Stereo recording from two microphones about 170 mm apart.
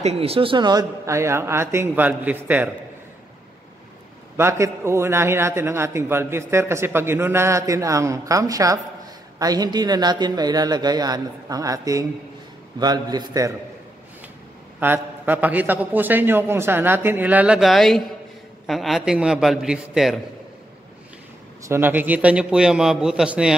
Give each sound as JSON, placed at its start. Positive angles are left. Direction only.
{"t": 0.0, "sound": "a man's voice", "side_deg": -35}
{"t": 4.4, "sound": "a man's voice", "side_deg": -15}
{"t": 14.8, "sound": "a man's voice", "side_deg": -10}
{"t": 21.6, "sound": "a man's voice", "side_deg": -15}